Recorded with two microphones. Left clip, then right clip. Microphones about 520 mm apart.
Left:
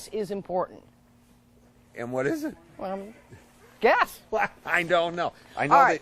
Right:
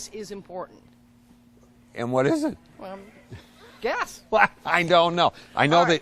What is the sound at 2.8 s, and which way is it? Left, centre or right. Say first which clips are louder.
A woman's voice: left 10 dB; left.